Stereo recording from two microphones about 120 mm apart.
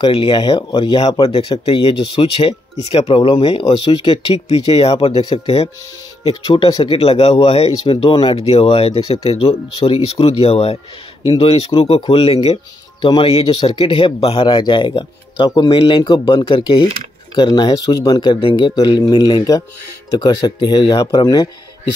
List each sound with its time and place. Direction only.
0.0 s speech: 45° left (ahead or behind)
4.5 s speech: 55° left (ahead or behind)
6.4 s speech: 45° left (ahead or behind)
16.0 s speech: 35° left (ahead or behind)